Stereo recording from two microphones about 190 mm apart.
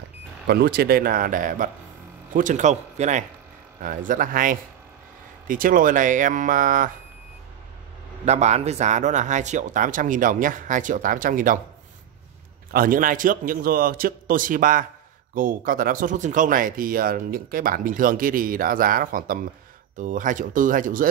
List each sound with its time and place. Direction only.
0.5 s speech: 55° right (ahead or behind)
8.3 s speech: 35° right (ahead or behind)
12.7 s speech: 45° right (ahead or behind)